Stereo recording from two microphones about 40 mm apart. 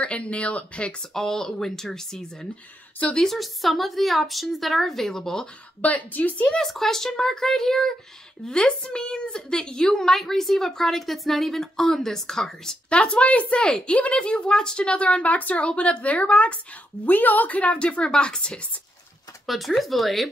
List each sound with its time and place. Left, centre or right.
0.0 s a woman's voice: left
1.1 s a woman's voice: centre
3.3 s a woman's voice: centre
5.8 s a woman's voice: left
6.4 s a woman's voice: centre
12.9 s a woman's voice: left
13.6 s speech: left
15.6 s a woman's voice: left
17.0 s a woman's voice: left
19.4 s a woman's voice: centre